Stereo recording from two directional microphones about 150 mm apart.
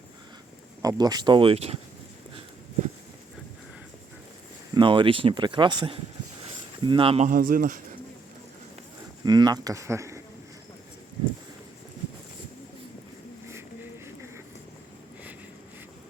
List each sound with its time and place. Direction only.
0.8 s speech: 25° right (ahead or behind); by 1.8 s 40° right (ahead or behind)
4.7 s speech: 35° right (ahead or behind)
7.3 s speech: 70° right (ahead or behind)
9.2 s speech: 25° right (ahead or behind)
13.5 s a sound: 15° right (ahead or behind)